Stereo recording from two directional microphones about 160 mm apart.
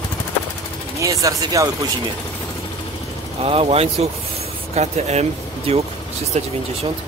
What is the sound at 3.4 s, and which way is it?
Speech, 40° right (ahead or behind).